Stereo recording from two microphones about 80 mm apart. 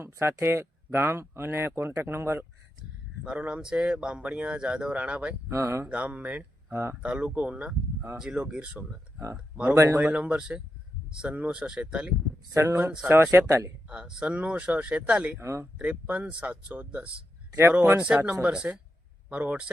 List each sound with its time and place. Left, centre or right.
0.0 s speech: right
3.2 s speech: centre
5.5 s speech: right
5.9 s speech: centre
9.7 s speech: right
10.0 s speech: centre
12.5 s speech: right
13.8 s speech: centre
15.4 s speech: right
15.8 s speech: centre